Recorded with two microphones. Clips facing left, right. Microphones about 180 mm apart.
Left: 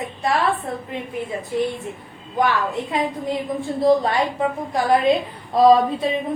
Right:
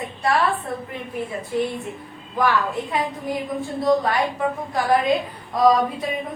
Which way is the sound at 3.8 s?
25° left (ahead or behind).